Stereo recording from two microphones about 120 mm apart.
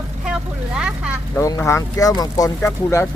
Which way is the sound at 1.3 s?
25° left (ahead or behind).